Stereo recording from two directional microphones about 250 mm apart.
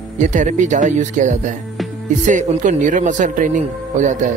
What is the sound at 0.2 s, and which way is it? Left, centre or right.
Speech, right.